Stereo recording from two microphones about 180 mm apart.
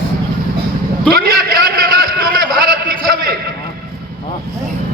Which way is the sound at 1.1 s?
55° right (ahead or behind).